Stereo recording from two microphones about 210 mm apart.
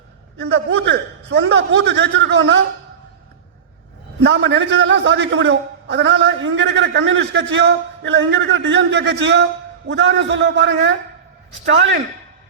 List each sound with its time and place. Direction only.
0.3 s a man's voice: 55° right (ahead or behind)
4.2 s a man's voice: 60° right (ahead or behind)